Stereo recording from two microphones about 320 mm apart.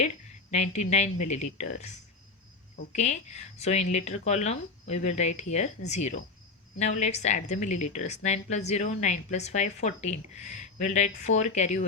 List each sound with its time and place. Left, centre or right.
0.5 s a woman's voice: left
2.9 s a woman's voice: left